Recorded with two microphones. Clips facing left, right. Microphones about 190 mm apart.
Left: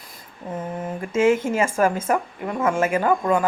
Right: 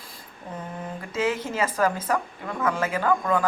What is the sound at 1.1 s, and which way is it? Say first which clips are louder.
Speech: left 8 dB; 50° left (ahead or behind).